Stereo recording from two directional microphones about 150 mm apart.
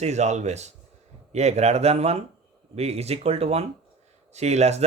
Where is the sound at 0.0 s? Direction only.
50° right (ahead or behind).